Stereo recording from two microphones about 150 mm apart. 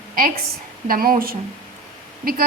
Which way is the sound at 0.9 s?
75° right (ahead or behind).